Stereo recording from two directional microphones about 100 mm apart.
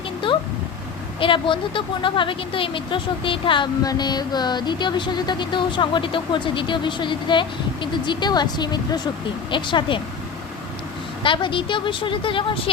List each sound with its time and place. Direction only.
0.3 s a sound: 55° left (ahead or behind)
1.2 s speech: 60° left (ahead or behind)
3.8 s speech: 45° left (ahead or behind)
11.2 s speech: 55° left (ahead or behind)